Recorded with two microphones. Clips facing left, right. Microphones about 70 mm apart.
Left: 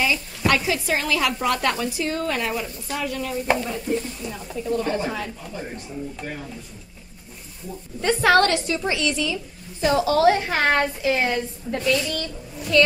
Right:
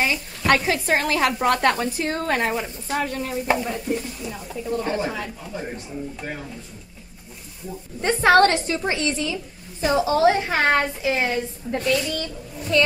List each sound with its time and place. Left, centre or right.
0.5 s a woman's voice: right
3.4 s stir: centre
4.7 s a woman's voice: centre
8.0 s a woman's voice: right
9.9 s a woman's voice: right
12.7 s a woman's voice: right